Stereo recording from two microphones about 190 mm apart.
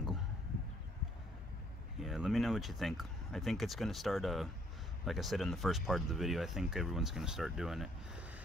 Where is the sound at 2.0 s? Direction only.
5° right (ahead or behind).